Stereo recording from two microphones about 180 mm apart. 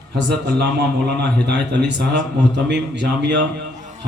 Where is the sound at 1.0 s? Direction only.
65° right (ahead or behind).